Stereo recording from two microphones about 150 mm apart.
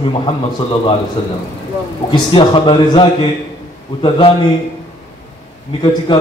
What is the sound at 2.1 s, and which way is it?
A man's voice, 35° left (ahead or behind).